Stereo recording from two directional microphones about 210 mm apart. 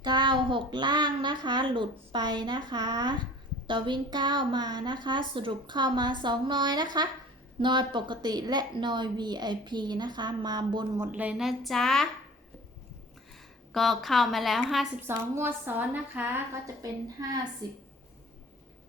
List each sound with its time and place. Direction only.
0.0 s a woman's voice: 20° right (ahead or behind)
11.0 s a woman's voice: 5° right (ahead or behind)
13.7 s a woman's voice: centre (ahead or behind)
15.0 s a woman's voice: 10° right (ahead or behind)